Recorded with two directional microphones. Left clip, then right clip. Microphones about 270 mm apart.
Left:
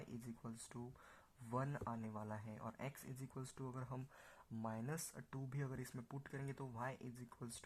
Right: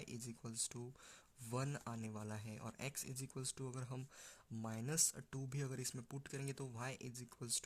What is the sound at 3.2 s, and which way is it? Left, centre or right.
Speech, right.